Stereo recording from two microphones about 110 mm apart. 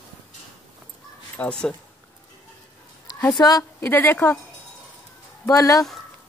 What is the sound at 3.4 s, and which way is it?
Speech, 35° left (ahead or behind).